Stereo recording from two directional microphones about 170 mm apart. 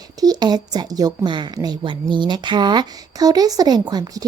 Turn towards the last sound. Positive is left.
turn(degrees=-25)  # may be behind; listen again after turning